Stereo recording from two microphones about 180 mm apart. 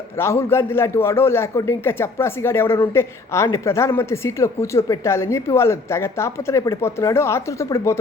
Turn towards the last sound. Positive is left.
turn(degrees=15)  # may be behind; listen again after turning